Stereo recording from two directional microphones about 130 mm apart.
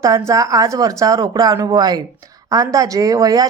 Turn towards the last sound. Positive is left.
turn(degrees=-30)  # may be behind; listen again after turning